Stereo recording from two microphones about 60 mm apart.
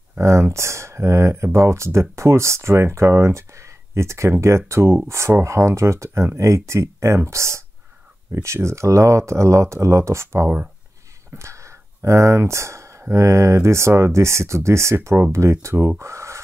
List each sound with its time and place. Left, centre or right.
0.2 s speech: right